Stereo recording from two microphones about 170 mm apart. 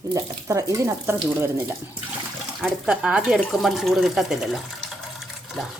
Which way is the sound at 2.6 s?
5° right (ahead or behind).